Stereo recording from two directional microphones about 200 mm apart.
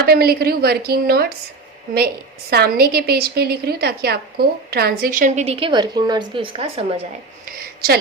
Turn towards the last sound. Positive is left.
turn(degrees=-45)  # may be behind; listen again after turning